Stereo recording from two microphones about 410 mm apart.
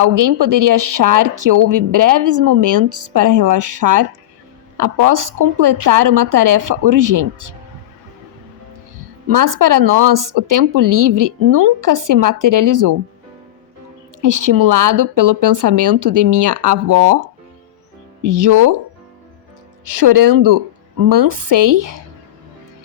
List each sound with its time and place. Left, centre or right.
0.0 s a woman's voice: right
9.2 s a woman's voice: right
14.2 s a woman's voice: right
19.8 s a woman's voice: right